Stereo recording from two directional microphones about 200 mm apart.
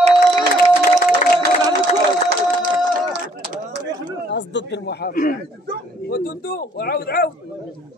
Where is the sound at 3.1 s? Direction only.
60° right (ahead or behind).